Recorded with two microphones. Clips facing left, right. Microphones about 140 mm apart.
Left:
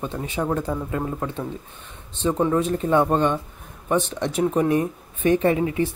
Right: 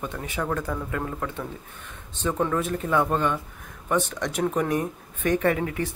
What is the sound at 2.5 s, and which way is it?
Speech, 30° left (ahead or behind).